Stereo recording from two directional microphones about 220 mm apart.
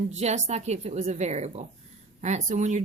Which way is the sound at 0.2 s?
30° right (ahead or behind).